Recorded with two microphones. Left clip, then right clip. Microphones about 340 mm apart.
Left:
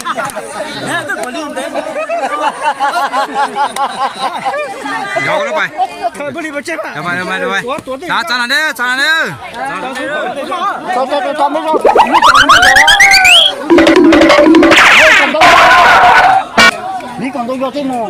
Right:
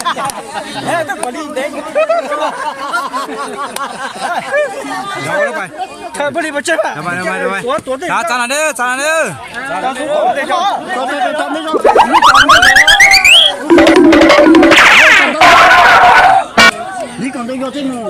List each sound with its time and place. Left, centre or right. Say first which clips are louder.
3.0 s a sound: left 6 dB; left
7.1 s speech: left 1 dB; centre
11.8 s boing: right 1 dB; centre